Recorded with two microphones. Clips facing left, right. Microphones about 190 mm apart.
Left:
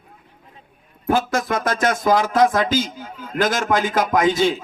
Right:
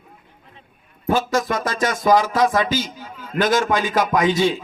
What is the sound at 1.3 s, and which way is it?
A man's voice, 55° left (ahead or behind).